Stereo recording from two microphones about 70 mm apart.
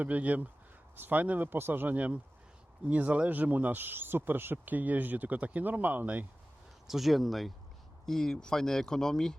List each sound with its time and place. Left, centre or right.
0.0 s speech: right
6.8 s speech: centre